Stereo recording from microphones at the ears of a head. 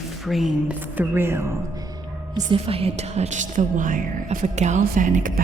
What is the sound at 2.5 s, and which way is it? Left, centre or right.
Speech, right.